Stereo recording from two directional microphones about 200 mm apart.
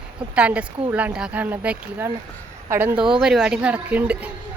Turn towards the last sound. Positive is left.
turn(degrees=-5)  # may be behind; listen again after turning